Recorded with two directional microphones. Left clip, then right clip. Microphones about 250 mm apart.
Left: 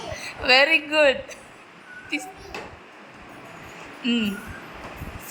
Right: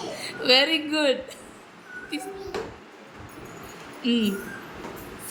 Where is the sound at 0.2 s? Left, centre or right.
Centre.